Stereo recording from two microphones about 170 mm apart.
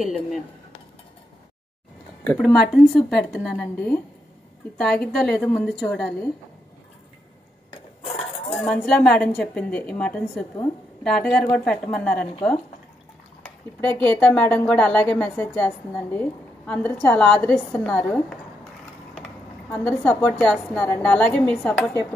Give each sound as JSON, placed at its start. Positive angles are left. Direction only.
{"t": 2.2, "sound": "a woman's voice", "side_deg": 5}
{"t": 7.7, "sound": "dishes", "side_deg": 35}
{"t": 8.5, "sound": "a woman's voice", "side_deg": 0}
{"t": 13.4, "sound": "speech", "side_deg": 5}
{"t": 19.1, "sound": "a sound", "side_deg": 0}
{"t": 19.8, "sound": "speech", "side_deg": 5}